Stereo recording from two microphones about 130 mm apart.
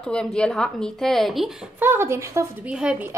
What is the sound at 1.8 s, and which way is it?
Speech, 20° right (ahead or behind).